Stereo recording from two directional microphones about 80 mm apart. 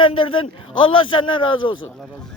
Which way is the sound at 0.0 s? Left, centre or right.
Left.